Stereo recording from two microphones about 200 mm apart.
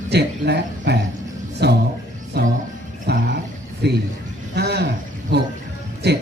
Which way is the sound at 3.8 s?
55° right (ahead or behind).